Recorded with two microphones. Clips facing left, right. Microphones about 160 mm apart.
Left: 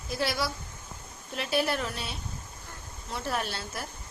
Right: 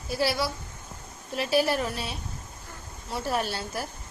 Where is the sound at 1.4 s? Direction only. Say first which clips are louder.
Right 4 dB; 35° right (ahead or behind).